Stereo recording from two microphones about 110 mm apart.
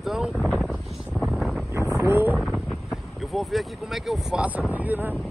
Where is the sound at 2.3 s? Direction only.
Centre (ahead or behind); by 5.1 s 15° right (ahead or behind).